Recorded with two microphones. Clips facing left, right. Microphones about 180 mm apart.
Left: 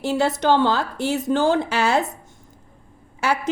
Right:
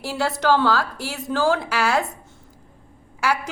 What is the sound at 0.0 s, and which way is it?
A woman's voice, 20° left (ahead or behind).